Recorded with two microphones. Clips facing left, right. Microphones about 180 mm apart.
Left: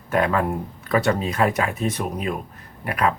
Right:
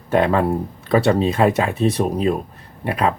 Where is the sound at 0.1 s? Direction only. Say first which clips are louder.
Right 4 dB; 30° right (ahead or behind).